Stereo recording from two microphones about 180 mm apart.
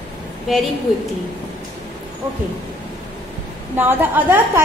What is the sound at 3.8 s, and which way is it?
Speech, 10° right (ahead or behind).